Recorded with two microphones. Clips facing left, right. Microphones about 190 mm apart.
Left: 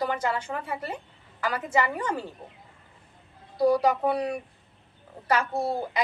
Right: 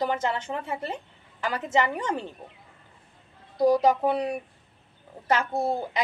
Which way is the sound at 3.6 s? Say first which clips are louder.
Right 1 dB; 20° right (ahead or behind).